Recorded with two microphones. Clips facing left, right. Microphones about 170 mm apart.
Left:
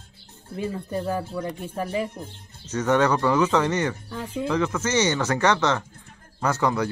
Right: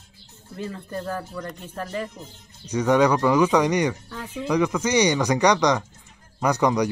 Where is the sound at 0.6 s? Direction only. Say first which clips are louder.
Left 3 dB; 10° left (ahead or behind).